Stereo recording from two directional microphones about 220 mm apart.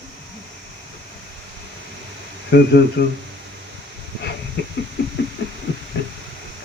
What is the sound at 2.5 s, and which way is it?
Speech, 50° left (ahead or behind).